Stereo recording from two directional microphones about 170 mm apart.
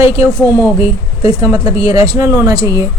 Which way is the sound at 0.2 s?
15° right (ahead or behind).